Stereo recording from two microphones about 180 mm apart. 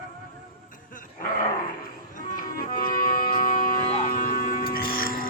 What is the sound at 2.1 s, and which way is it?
Music, 50° left (ahead or behind).